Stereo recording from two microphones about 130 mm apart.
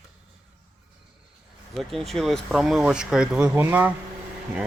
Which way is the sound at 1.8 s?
Centre (ahead or behind).